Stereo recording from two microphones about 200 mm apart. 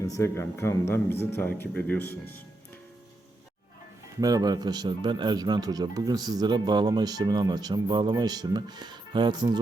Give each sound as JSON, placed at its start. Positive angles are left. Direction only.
{"t": 0.0, "sound": "speech", "side_deg": 15}
{"t": 4.2, "sound": "speech", "side_deg": -20}